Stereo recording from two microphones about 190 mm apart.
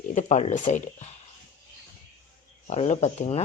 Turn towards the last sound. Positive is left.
turn(degrees=35)  # may be behind; listen again after turning